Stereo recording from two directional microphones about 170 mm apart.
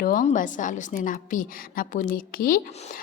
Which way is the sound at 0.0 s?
50° left (ahead or behind).